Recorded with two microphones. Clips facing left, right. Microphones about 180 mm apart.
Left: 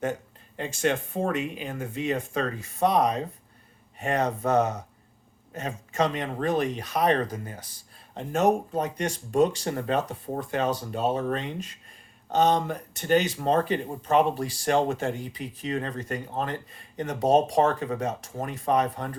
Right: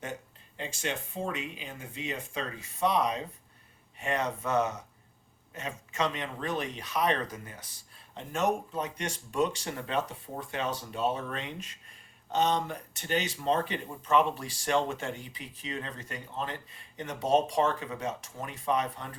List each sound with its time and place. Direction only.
0.0 s speech: 50° left (ahead or behind)